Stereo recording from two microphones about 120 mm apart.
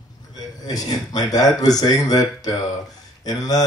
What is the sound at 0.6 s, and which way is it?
Speech, 30° left (ahead or behind).